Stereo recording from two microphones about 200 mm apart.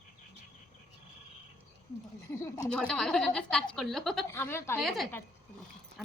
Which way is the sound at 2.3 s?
15° left (ahead or behind).